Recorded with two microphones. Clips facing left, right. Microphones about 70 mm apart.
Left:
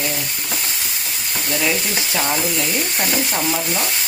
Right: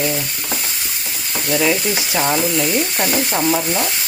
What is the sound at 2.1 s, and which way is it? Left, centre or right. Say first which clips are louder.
Frying: right 3 dB; centre.